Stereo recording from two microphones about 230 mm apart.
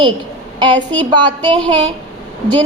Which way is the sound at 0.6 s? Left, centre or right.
Centre.